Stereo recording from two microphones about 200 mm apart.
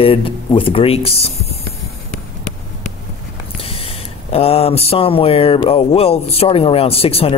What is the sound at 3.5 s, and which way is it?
Speech, 30° left (ahead or behind).